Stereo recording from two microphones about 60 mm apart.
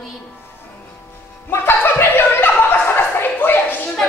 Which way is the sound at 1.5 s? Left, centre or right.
Left.